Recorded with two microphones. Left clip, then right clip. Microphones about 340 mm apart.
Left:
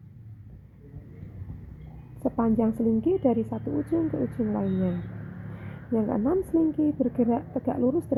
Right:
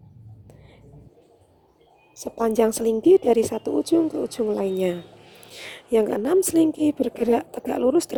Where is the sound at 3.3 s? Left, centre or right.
Right.